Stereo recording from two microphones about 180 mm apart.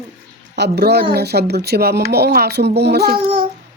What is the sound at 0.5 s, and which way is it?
A child's voice, 65° right (ahead or behind).